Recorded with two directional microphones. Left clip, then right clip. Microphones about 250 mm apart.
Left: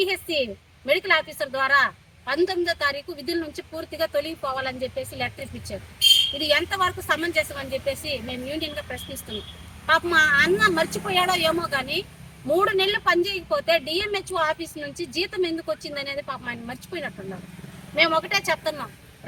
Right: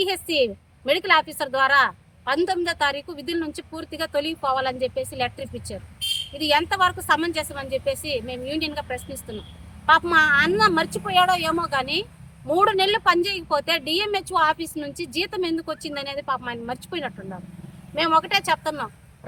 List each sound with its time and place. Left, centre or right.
0.0 s speech: right
9.8 s speech: centre